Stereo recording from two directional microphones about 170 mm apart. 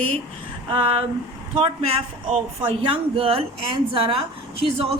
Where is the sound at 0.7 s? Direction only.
35° right (ahead or behind).